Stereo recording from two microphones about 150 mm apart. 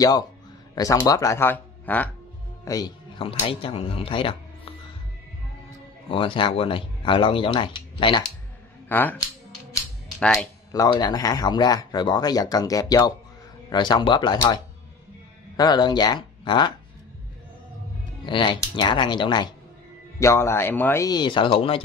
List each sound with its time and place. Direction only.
0.7 s speech: 25° left (ahead or behind)
2.6 s speech: 25° left (ahead or behind)
3.4 s speech: 35° left (ahead or behind)
6.0 s speech: 35° left (ahead or behind)
8.8 s speech: 15° left (ahead or behind)
10.7 s speech: 25° left (ahead or behind)
18.2 s speech: 30° left (ahead or behind)
20.2 s speech: 20° left (ahead or behind); by 21.8 s 35° left (ahead or behind)